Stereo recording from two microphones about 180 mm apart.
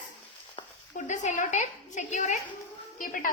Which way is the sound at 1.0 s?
40° left (ahead or behind).